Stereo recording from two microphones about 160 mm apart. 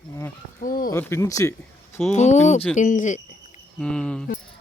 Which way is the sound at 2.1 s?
45° left (ahead or behind).